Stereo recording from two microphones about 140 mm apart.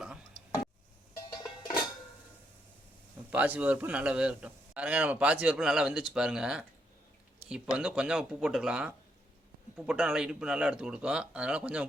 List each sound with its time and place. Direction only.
1.1 s music: 25° left (ahead or behind)
3.2 s a man's voice: 10° right (ahead or behind)
7.8 s a man's voice: 5° right (ahead or behind)